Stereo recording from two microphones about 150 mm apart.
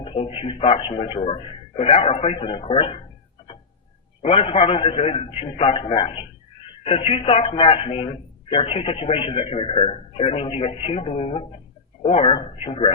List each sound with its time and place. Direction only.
0.0 s a man's voice: 40° left (ahead or behind)
4.2 s a man's voice: 40° left (ahead or behind)